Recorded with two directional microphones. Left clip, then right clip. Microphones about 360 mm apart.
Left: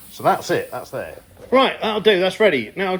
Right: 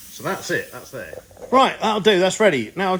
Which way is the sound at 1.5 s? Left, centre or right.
Centre.